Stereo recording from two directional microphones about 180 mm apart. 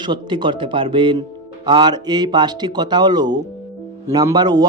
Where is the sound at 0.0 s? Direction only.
25° right (ahead or behind).